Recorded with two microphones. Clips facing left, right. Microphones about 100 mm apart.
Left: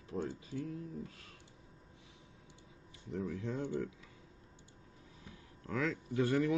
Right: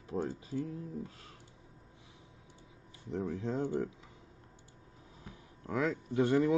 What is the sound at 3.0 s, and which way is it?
Speech, 30° right (ahead or behind).